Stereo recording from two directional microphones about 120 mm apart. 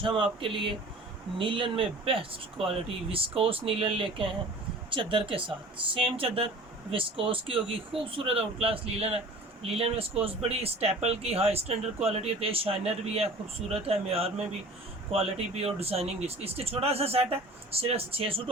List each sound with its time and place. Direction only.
0.0 s speech: 45° right (ahead or behind)